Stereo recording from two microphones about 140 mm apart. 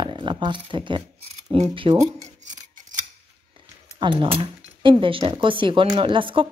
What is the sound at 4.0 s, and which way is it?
Speech, 35° right (ahead or behind).